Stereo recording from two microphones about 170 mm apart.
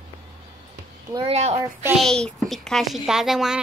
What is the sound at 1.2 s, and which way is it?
Speech, 40° right (ahead or behind).